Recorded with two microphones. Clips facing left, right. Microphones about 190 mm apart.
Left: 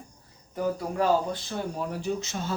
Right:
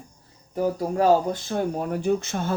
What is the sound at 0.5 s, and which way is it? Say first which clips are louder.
Speech: right 4 dB; 35° right (ahead or behind).